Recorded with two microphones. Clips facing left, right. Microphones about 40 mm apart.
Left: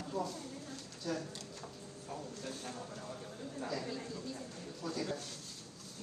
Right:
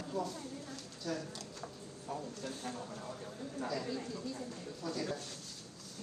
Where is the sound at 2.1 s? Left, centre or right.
Right.